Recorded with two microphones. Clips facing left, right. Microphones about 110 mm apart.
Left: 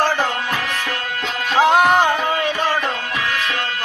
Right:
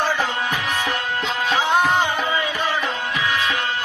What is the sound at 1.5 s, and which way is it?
Music, 90° left.